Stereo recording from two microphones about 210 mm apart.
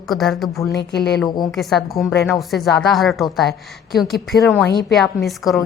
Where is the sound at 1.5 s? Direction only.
Centre (ahead or behind).